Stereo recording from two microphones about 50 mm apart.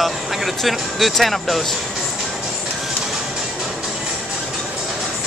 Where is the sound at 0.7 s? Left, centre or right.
Centre.